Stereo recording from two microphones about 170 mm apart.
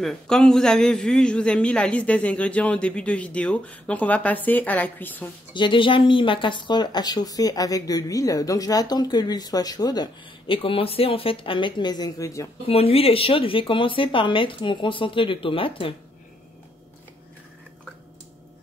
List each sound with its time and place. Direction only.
0.0 s a man's voice: 5° left (ahead or behind)
5.5 s speech: 30° left (ahead or behind)
12.6 s speech: 35° left (ahead or behind)